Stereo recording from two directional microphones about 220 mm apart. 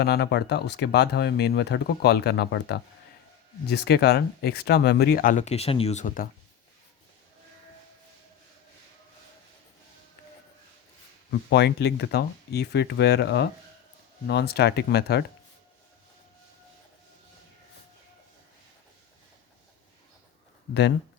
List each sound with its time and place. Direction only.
0.0 s speech: 45° left (ahead or behind)
11.3 s speech: 50° left (ahead or behind)